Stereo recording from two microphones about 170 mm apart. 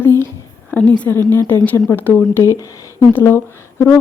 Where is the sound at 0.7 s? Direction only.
10° left (ahead or behind).